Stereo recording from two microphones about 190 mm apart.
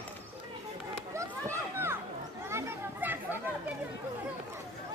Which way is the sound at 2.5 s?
10° right (ahead or behind).